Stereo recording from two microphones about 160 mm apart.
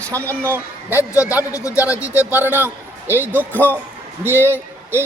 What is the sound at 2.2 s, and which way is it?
A man's voice, 10° right (ahead or behind).